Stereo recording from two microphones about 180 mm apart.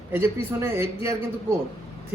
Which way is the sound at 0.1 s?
15° right (ahead or behind).